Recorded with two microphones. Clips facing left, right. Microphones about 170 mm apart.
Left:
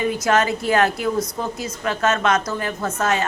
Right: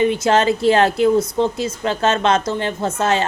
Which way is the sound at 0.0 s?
25° right (ahead or behind).